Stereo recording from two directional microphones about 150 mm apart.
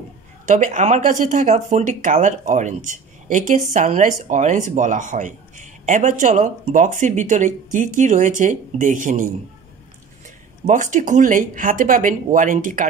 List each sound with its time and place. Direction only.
0.5 s speech: 55° right (ahead or behind)
10.7 s speech: 55° right (ahead or behind)